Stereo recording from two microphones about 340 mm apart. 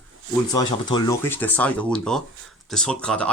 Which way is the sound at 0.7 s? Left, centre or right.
Centre.